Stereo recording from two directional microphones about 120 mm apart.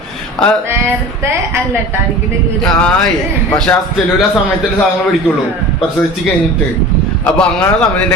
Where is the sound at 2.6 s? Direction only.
10° left (ahead or behind).